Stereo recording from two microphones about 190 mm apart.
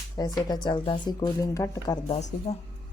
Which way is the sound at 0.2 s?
20° left (ahead or behind).